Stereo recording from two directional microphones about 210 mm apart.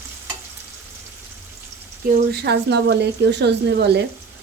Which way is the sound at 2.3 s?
50° right (ahead or behind).